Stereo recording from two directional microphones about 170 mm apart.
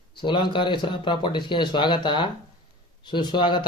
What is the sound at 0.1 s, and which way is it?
Speech, 30° left (ahead or behind).